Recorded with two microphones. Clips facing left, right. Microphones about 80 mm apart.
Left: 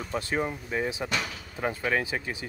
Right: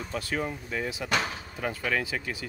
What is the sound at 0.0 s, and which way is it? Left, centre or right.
Speech, left.